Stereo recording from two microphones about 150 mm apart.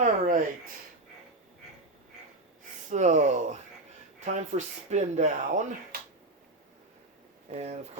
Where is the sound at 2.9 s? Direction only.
55° right (ahead or behind).